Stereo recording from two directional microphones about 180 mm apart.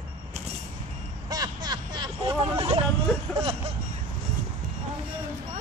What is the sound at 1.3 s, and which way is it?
Vehicle, 20° right (ahead or behind).